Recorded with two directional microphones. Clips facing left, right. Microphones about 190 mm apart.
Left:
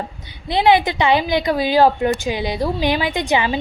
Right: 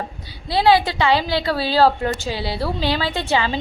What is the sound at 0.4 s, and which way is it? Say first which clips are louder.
A woman's voice: left 1 dB; 20° left (ahead or behind).